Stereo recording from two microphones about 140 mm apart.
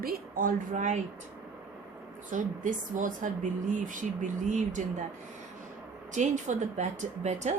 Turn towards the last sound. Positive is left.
turn(degrees=-55)  # may be behind; listen again after turning